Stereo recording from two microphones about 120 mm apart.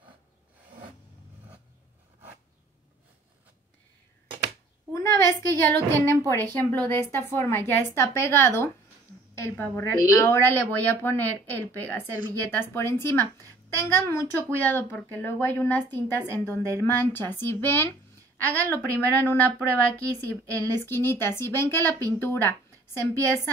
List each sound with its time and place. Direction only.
4.9 s a woman's voice: 25° left (ahead or behind)